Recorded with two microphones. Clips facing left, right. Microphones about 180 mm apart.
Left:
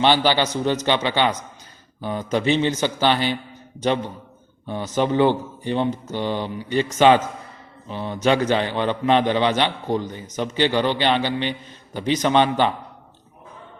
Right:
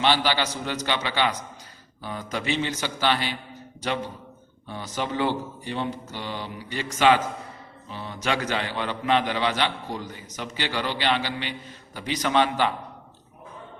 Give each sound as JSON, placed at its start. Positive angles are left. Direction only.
{"t": 0.0, "sound": "a man's voice", "side_deg": 25}
{"t": 4.7, "sound": "a man's voice", "side_deg": 25}